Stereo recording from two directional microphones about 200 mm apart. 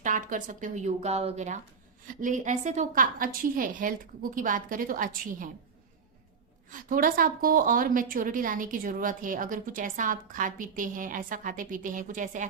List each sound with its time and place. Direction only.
0.0 s a woman's voice: 40° right (ahead or behind)
6.7 s a woman's voice: 40° right (ahead or behind)